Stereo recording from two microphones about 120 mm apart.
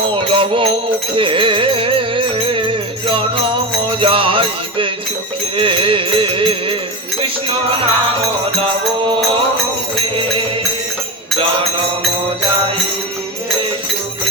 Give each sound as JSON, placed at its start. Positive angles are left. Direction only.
{"t": 0.2, "sound": "music", "side_deg": -50}